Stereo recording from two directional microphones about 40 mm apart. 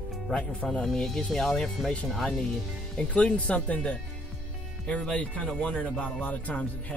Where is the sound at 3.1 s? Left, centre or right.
Left.